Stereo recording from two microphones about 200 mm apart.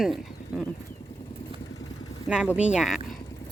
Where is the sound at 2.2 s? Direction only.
5° right (ahead or behind).